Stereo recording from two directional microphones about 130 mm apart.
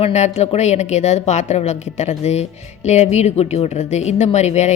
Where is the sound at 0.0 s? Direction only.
60° left (ahead or behind).